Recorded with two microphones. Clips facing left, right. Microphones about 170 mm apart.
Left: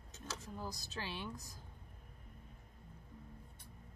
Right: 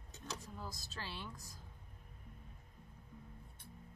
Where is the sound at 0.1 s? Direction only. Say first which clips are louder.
Even; 15° right (ahead or behind).